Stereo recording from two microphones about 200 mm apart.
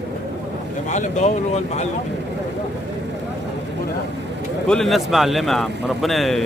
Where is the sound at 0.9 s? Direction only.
35° left (ahead or behind).